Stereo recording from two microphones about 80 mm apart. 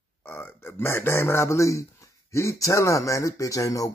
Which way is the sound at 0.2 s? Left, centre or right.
Left.